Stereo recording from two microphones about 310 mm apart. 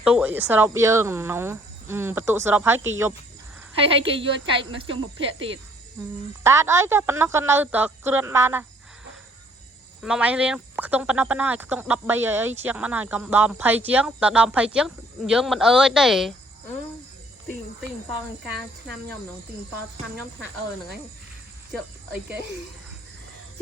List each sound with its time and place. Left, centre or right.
0.0 s speech: centre
6.4 s speech: centre
10.0 s speech: centre